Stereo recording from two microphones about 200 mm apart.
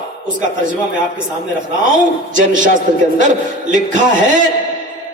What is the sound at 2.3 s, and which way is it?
A man's voice, 40° right (ahead or behind).